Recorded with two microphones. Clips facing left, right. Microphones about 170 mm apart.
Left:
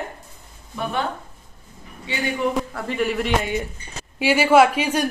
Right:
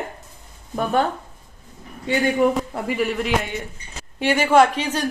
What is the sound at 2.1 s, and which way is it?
Speech, 45° right (ahead or behind).